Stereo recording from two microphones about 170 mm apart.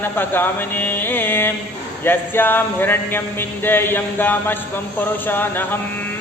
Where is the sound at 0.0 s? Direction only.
10° left (ahead or behind).